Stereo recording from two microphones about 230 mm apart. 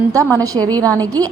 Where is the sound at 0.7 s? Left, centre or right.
Centre.